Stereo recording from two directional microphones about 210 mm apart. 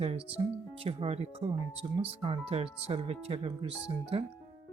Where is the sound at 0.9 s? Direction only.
30° right (ahead or behind).